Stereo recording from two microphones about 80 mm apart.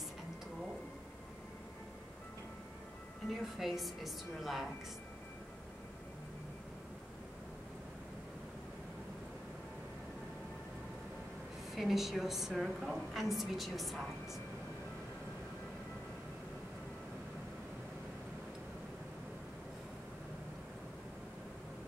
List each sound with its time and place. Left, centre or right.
3.5 s a woman's voice: centre
11.7 s a woman's voice: centre